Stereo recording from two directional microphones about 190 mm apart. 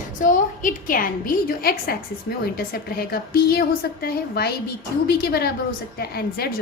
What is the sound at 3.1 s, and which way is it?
A woman's voice, 55° left (ahead or behind).